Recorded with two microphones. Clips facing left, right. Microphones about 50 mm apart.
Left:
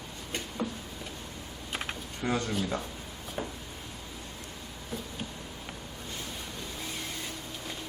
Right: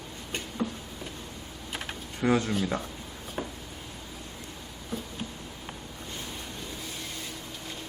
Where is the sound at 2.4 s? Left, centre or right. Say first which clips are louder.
Right 3 dB; centre.